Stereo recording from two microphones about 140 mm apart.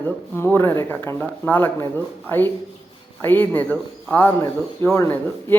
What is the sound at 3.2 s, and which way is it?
A woman's voice, 15° left (ahead or behind).